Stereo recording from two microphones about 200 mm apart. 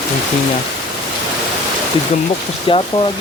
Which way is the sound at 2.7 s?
25° left (ahead or behind).